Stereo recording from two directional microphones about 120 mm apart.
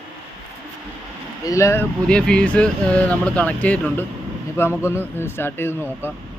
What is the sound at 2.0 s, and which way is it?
Speech, 5° left (ahead or behind).